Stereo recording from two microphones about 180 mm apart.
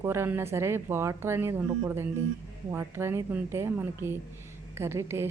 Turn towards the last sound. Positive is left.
turn(degrees=-15)  # may be behind; listen again after turning